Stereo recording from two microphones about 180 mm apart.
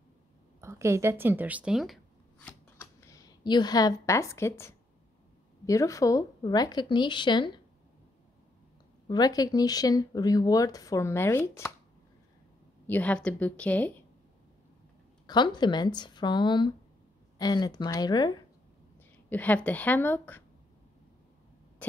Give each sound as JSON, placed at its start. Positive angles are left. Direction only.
{"t": 0.6, "sound": "speech", "side_deg": -15}
{"t": 2.4, "sound": "scissors", "side_deg": 15}
{"t": 5.7, "sound": "speech", "side_deg": 20}
{"t": 9.0, "sound": "speech", "side_deg": 20}
{"t": 12.8, "sound": "a woman's voice", "side_deg": 10}
{"t": 15.2, "sound": "speech", "side_deg": 25}
{"t": 19.2, "sound": "a woman's voice", "side_deg": 10}